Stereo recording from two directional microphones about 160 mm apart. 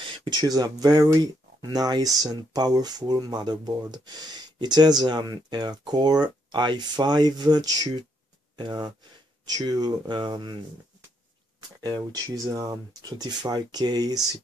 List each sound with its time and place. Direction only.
0.0 s speech: 30° right (ahead or behind)
11.8 s speech: 25° right (ahead or behind)